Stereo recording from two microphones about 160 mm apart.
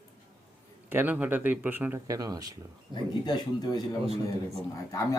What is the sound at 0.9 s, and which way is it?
Speech, 10° right (ahead or behind).